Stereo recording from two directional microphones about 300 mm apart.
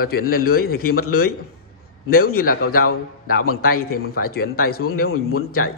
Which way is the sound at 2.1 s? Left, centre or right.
Left.